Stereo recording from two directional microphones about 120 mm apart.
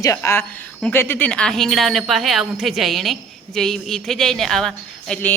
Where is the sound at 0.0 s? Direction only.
25° left (ahead or behind).